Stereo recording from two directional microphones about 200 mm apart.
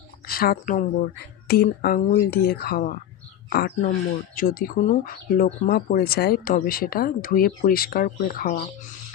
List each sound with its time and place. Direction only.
0.3 s speech: 50° left (ahead or behind)
4.4 s speech: 45° left (ahead or behind)